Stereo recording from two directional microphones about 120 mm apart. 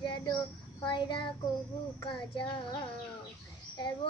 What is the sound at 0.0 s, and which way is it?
Child singing, 40° left (ahead or behind).